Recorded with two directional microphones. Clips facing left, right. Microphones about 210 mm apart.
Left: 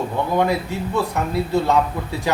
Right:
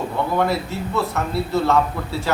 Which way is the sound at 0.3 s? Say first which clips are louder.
Left 2 dB; 15° left (ahead or behind).